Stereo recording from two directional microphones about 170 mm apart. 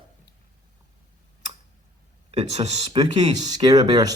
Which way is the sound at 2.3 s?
40° right (ahead or behind).